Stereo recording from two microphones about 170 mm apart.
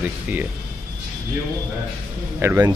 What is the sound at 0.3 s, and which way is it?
Speech, 10° right (ahead or behind).